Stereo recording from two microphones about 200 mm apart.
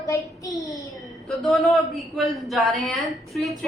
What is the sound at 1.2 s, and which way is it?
A man's voice, centre (ahead or behind).